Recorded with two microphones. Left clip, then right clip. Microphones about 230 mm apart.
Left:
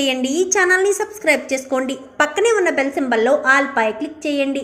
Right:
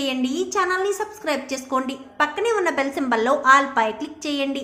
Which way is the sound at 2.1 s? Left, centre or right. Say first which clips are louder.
Left 5 dB; centre.